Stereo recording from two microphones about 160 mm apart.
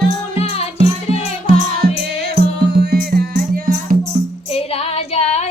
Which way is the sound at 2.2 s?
90° right.